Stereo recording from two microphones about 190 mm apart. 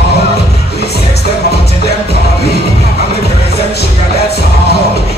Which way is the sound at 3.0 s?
55° left (ahead or behind).